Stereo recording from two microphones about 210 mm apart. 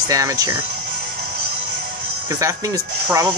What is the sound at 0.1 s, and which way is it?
Speech, 15° right (ahead or behind).